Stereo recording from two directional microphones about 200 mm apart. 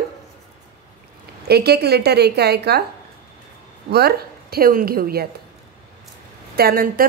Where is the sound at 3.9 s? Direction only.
50° right (ahead or behind).